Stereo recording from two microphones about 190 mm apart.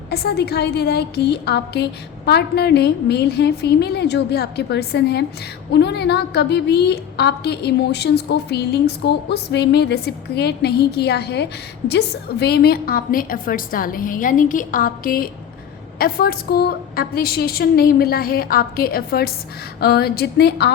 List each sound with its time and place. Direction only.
0.1 s a woman's voice: 60° left (ahead or behind)